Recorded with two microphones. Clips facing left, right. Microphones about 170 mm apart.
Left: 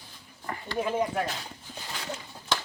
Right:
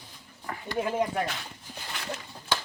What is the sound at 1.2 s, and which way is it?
Speech, 35° left (ahead or behind).